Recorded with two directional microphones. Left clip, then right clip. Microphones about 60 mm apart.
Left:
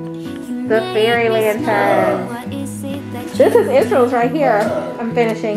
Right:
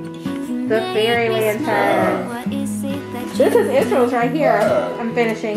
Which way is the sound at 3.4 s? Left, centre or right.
Left.